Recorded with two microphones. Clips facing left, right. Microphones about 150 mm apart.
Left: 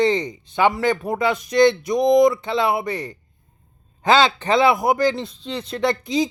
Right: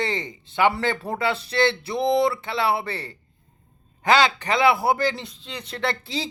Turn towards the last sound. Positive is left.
turn(degrees=15)  # may be behind; listen again after turning